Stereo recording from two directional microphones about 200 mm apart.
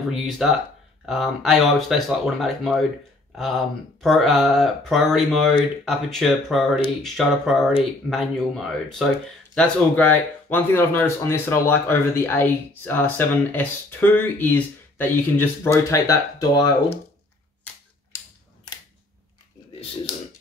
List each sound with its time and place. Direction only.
0.4 s speech: 5° right (ahead or behind); by 17.0 s 20° left (ahead or behind)